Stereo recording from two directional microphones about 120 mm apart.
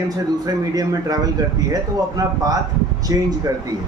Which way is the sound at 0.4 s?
30° right (ahead or behind).